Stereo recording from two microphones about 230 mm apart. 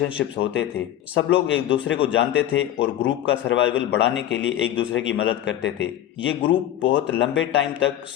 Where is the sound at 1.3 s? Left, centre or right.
Left.